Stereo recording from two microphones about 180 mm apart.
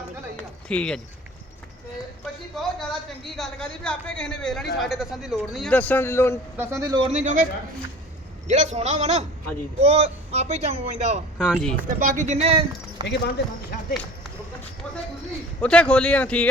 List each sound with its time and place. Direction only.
0.7 s speech: 5° left (ahead or behind)
2.5 s a sound: centre (ahead or behind)
3.2 s speech: centre (ahead or behind)
5.7 s a man's voice: 10° left (ahead or behind)
6.6 s speech: 15° right (ahead or behind)
7.1 s a man's voice: 45° right (ahead or behind)
8.4 s speech: 40° right (ahead or behind)
11.3 s speech: centre (ahead or behind)
11.9 s speech: 45° right (ahead or behind)
13.1 s speech: 65° left (ahead or behind)
15.6 s a man's voice: 5° left (ahead or behind)